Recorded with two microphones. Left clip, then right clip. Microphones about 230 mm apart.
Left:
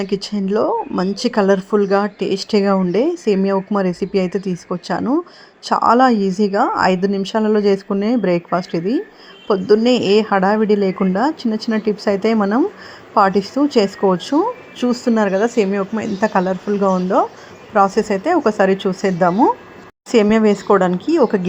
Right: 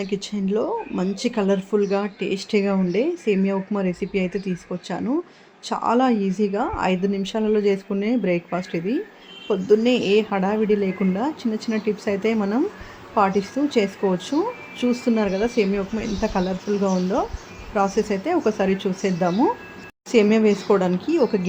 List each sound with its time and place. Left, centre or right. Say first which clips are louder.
0.3 s a woman's voice: left 7 dB; left